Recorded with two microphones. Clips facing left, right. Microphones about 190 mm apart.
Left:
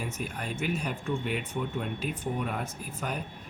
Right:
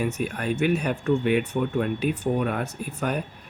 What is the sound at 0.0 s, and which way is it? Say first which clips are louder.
Speech: right 9 dB; 70° right (ahead or behind).